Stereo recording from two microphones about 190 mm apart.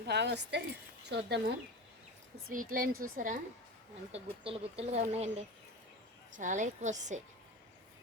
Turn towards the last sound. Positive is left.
turn(degrees=-40)  # may be behind; listen again after turning